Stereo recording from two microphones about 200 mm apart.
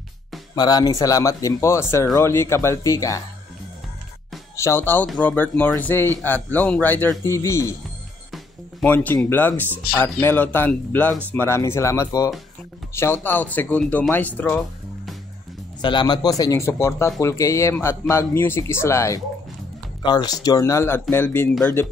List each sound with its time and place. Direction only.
0.6 s speech: 20° left (ahead or behind)
4.6 s speech: 15° left (ahead or behind)
8.8 s speech: 10° left (ahead or behind)
15.8 s speech: 25° left (ahead or behind)